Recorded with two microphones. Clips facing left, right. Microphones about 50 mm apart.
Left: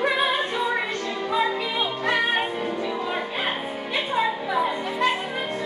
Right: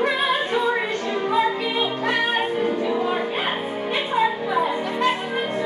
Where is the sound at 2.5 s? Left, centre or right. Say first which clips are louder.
Right 5 dB; centre.